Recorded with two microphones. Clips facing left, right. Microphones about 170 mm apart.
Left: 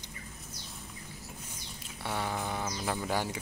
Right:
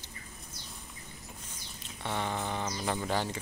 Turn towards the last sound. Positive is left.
turn(degrees=10)  # may be behind; listen again after turning